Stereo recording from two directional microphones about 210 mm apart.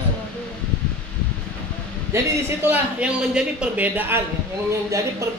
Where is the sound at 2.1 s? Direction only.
10° right (ahead or behind).